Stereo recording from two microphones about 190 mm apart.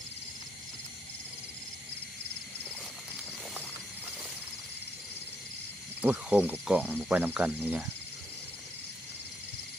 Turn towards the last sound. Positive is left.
turn(degrees=-10)  # may be behind; listen again after turning